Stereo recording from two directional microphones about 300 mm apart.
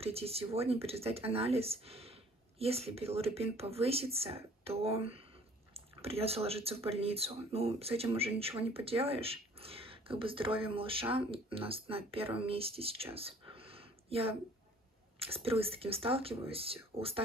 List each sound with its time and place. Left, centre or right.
0.0 s speech: centre